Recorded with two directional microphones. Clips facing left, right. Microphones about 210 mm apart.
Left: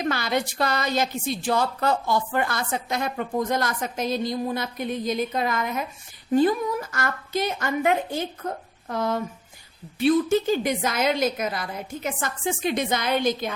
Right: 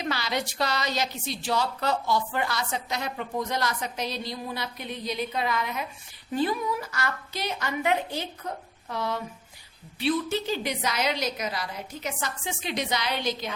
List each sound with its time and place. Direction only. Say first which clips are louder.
0.0 s a woman's voice: left 5 dB; 50° left (ahead or behind)